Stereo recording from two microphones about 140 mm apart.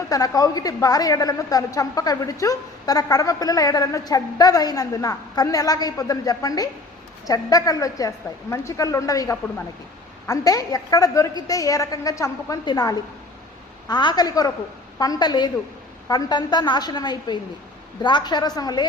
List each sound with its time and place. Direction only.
0.1 s a woman's voice: 25° left (ahead or behind)